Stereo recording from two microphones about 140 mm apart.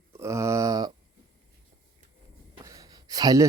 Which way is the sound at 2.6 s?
25° right (ahead or behind).